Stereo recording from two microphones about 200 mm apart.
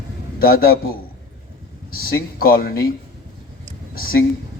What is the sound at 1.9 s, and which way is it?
Speech, 50° left (ahead or behind).